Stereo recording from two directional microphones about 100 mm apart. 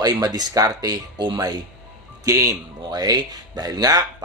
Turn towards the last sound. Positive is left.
turn(degrees=-40)  # may be behind; listen again after turning